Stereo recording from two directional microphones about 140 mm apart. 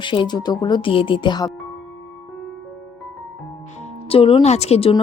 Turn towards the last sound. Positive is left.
turn(degrees=45)  # may be behind; listen again after turning